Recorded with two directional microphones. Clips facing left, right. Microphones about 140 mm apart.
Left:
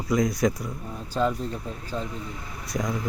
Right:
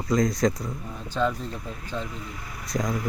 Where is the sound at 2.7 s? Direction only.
5° left (ahead or behind).